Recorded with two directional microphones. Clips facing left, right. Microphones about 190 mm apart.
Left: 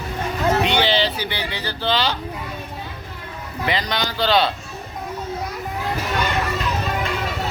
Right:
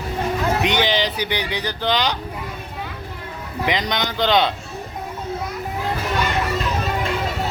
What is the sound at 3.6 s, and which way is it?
Speech, 20° right (ahead or behind).